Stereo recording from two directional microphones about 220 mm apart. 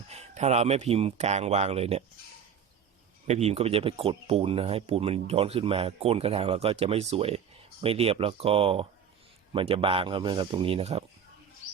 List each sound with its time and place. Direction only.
0.1 s speech: 30° right (ahead or behind)
3.2 s speech: 30° right (ahead or behind)